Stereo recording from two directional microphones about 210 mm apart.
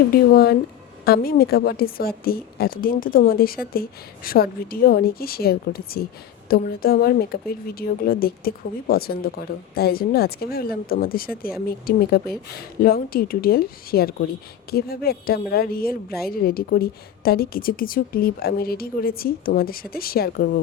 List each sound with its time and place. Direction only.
0.1 s a woman's voice: 45° left (ahead or behind)